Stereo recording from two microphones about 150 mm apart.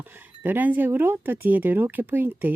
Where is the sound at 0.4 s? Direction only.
10° right (ahead or behind).